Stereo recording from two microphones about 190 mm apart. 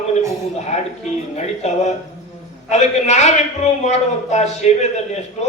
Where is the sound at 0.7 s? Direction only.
35° left (ahead or behind).